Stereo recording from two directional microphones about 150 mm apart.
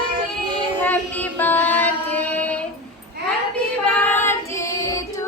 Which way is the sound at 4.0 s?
15° left (ahead or behind).